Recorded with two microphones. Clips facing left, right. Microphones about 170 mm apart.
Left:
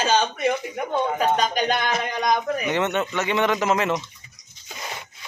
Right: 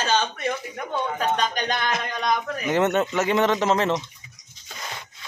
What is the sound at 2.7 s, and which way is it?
Speech, 40° right (ahead or behind).